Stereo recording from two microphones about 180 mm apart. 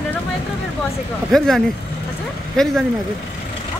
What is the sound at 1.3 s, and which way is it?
Speech, centre (ahead or behind).